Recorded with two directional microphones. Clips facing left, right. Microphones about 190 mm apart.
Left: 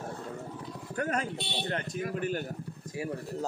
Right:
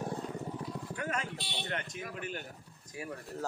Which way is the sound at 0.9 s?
40° left (ahead or behind).